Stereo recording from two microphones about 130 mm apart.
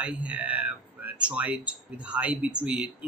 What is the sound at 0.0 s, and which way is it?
Speech, 10° right (ahead or behind).